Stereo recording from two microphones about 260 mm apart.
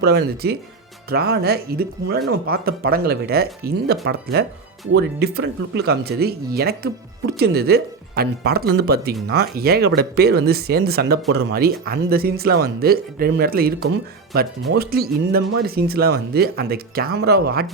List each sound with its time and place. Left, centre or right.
0.0 s speech: right